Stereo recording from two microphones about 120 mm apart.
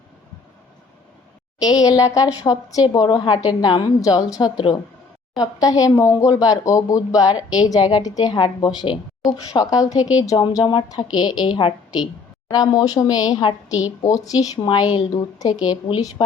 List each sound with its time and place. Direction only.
1.6 s speech: 30° left (ahead or behind)
10.0 s speech: 10° right (ahead or behind)
10.2 s speech: 35° left (ahead or behind)